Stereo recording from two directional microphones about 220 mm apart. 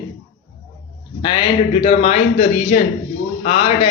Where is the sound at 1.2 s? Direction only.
25° left (ahead or behind).